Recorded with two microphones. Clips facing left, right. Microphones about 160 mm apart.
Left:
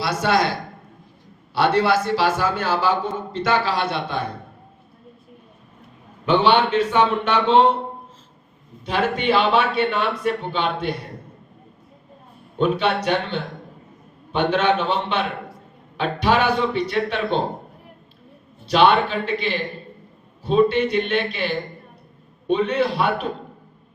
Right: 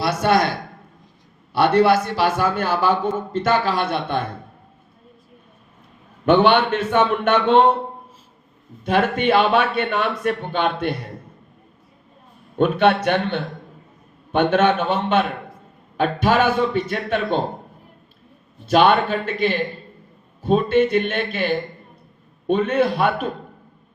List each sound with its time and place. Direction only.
0.0 s a man's voice: 50° right (ahead or behind)
1.5 s a man's voice: 55° right (ahead or behind)
6.2 s a man's voice: 55° right (ahead or behind)
8.8 s a man's voice: 50° right (ahead or behind)
12.5 s a man's voice: 55° right (ahead or behind)
18.7 s a man's voice: 50° right (ahead or behind)